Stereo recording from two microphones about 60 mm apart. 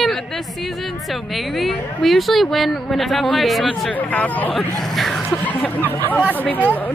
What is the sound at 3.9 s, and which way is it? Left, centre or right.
Speech, left.